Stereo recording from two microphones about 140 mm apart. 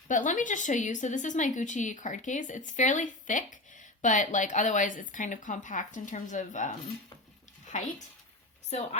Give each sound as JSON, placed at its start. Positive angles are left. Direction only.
{"t": 0.1, "sound": "a woman's voice", "side_deg": 65}
{"t": 7.7, "sound": "a woman's voice", "side_deg": 60}